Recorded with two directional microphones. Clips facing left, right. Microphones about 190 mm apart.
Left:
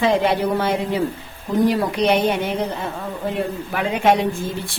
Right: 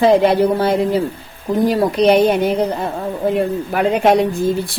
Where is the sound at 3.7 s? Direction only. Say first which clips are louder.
Right 4 dB; 40° right (ahead or behind).